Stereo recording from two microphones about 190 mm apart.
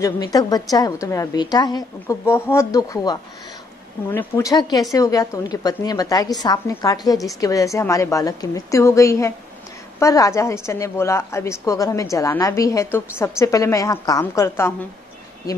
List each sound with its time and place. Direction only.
0.0 s a woman's voice: 20° left (ahead or behind)